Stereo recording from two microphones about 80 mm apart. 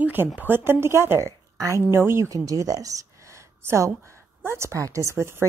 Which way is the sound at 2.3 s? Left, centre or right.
Right.